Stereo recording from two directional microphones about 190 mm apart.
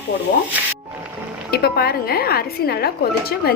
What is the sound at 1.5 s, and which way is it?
A woman's voice, 55° left (ahead or behind).